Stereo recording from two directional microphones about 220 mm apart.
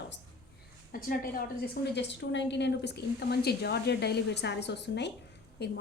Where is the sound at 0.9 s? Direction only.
40° left (ahead or behind).